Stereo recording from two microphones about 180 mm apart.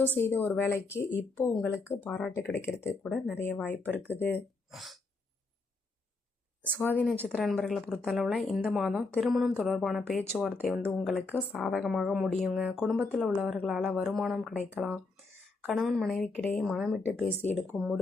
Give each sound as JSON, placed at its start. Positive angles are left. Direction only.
{"t": 0.0, "sound": "speech", "side_deg": 10}
{"t": 3.0, "sound": "speech", "side_deg": 5}
{"t": 4.7, "sound": "speech", "side_deg": 0}
{"t": 6.6, "sound": "speech", "side_deg": 10}
{"t": 17.7, "sound": "speech", "side_deg": 0}